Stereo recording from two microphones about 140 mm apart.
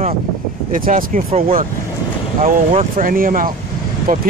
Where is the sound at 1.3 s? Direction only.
45° right (ahead or behind).